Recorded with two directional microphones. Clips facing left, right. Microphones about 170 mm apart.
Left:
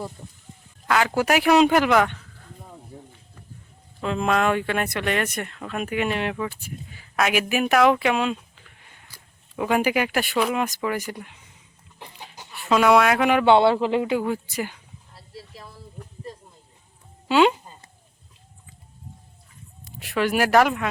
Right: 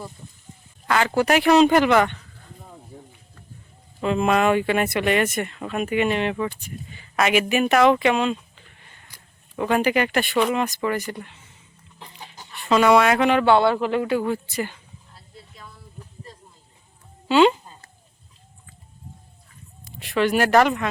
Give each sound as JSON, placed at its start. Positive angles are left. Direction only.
{"t": 0.9, "sound": "speech", "side_deg": 5}
{"t": 4.0, "sound": "speech", "side_deg": -5}
{"t": 11.9, "sound": "chicken", "side_deg": 10}
{"t": 13.4, "sound": "speech", "side_deg": 20}
{"t": 15.1, "sound": "a sound", "side_deg": 30}
{"t": 17.2, "sound": "speech", "side_deg": 5}
{"t": 20.0, "sound": "speech", "side_deg": 5}